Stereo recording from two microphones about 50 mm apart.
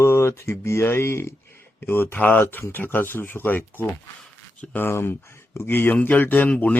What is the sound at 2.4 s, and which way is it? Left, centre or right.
Speech, left.